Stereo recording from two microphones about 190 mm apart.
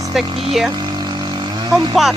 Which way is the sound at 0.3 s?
30° right (ahead or behind).